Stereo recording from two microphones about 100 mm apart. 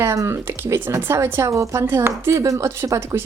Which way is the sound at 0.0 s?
30° right (ahead or behind).